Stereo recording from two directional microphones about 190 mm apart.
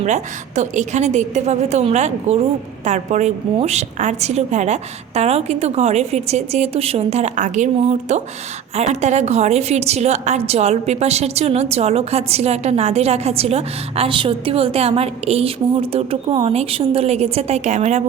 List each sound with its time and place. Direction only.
0.0 s a woman's voice: 40° right (ahead or behind)